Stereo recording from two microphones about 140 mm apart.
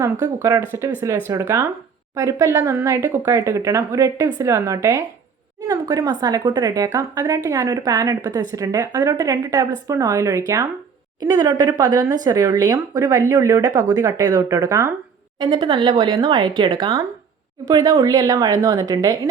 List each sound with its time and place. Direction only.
0.4 s speech: 20° right (ahead or behind)
15.4 s speech: 35° right (ahead or behind)